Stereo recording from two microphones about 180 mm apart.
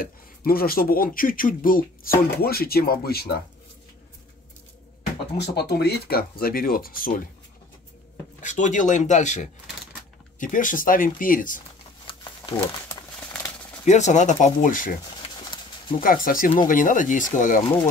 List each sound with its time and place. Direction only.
0.0 s speech: 55° left (ahead or behind)
5.4 s speech: 65° left (ahead or behind)
8.4 s speech: 45° left (ahead or behind)
12.1 s crumpling: 20° left (ahead or behind)
13.8 s speech: 40° left (ahead or behind)
16.0 s speech: 50° left (ahead or behind)